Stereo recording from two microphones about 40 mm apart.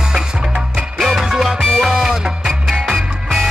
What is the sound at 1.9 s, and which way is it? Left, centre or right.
Music, centre.